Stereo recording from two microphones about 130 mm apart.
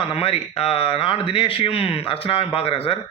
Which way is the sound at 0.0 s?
45° left (ahead or behind).